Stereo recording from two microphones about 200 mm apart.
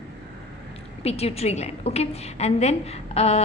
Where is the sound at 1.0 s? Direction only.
30° left (ahead or behind).